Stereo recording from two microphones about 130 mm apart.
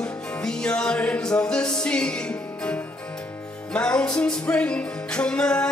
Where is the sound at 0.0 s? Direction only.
5° left (ahead or behind).